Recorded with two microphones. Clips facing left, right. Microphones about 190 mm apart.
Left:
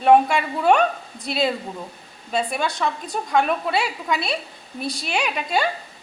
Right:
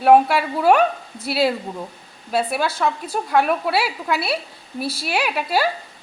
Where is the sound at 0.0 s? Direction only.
5° right (ahead or behind).